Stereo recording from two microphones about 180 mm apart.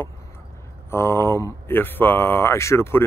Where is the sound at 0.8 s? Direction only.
15° left (ahead or behind).